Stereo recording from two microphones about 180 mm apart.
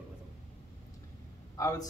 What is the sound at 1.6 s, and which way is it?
Speech, 20° left (ahead or behind).